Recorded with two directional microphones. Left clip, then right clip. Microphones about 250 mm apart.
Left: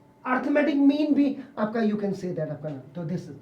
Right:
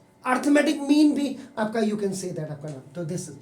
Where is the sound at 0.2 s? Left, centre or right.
Right.